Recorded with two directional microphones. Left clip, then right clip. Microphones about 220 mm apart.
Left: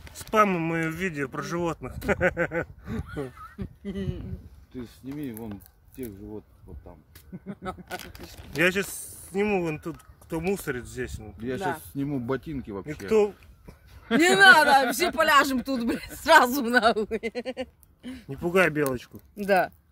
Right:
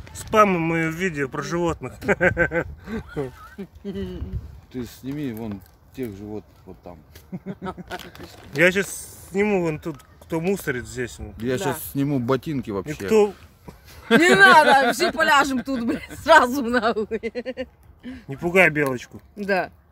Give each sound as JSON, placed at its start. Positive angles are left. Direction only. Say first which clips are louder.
{"t": 0.1, "sound": "speech", "louder": "right 5 dB", "side_deg": 0}
{"t": 3.3, "sound": "speech", "louder": "right 3 dB", "side_deg": 25}
{"t": 4.7, "sound": "speech", "louder": "right 6 dB", "side_deg": -50}
{"t": 7.6, "sound": "speech", "louder": "right 2 dB", "side_deg": 30}
{"t": 8.5, "sound": "speech", "louder": "right 6 dB", "side_deg": 0}
{"t": 11.3, "sound": "speech", "louder": "right 5 dB", "side_deg": -50}
{"t": 13.1, "sound": "speech", "louder": "right 4 dB", "side_deg": -10}
{"t": 14.2, "sound": "speech", "louder": "right 3 dB", "side_deg": 15}
{"t": 15.1, "sound": "speech", "louder": "even", "side_deg": 30}
{"t": 18.3, "sound": "speech", "louder": "right 5 dB", "side_deg": 0}
{"t": 19.3, "sound": "speech", "louder": "even", "side_deg": 35}